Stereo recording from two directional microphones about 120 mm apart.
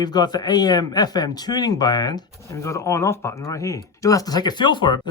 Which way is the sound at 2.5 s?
25° left (ahead or behind).